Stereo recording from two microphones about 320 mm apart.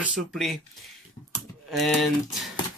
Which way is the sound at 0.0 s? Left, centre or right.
Centre.